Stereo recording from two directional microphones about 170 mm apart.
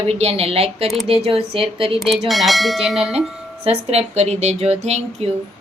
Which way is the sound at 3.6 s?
40° right (ahead or behind).